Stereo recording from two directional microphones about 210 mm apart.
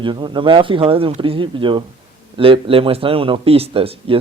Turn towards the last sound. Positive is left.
turn(degrees=-25)  # may be behind; listen again after turning